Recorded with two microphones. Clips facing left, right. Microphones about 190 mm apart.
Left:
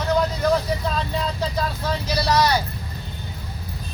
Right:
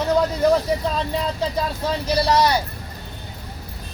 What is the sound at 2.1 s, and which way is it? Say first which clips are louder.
Speech: right 2 dB; 25° right (ahead or behind).